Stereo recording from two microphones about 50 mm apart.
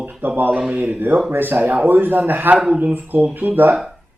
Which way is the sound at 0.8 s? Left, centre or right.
Right.